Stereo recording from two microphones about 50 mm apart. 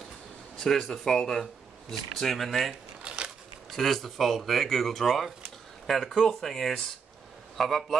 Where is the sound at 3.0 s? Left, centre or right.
Right.